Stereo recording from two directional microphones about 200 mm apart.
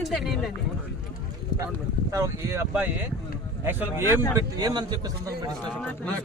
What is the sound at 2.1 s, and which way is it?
Speech, 15° right (ahead or behind).